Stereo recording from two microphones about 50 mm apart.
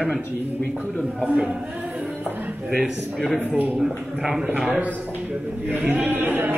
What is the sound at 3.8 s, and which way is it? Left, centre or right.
Speech, centre.